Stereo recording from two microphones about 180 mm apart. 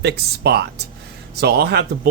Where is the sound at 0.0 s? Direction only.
65° right (ahead or behind).